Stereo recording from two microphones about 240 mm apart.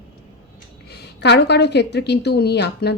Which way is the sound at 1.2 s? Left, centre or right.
Left.